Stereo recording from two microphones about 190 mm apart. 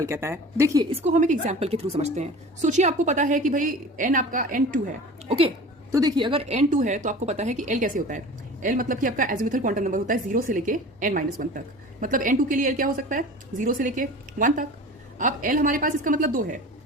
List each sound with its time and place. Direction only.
0.0 s a woman's voice: 15° right (ahead or behind)
0.9 s a woman's voice: 40° right (ahead or behind)
5.9 s a woman's voice: 20° right (ahead or behind); by 16.6 s 45° right (ahead or behind)